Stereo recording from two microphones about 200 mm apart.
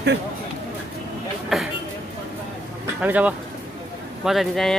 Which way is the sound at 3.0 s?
5° right (ahead or behind).